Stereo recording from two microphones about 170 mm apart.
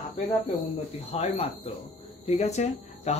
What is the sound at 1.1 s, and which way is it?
Speech, 35° left (ahead or behind).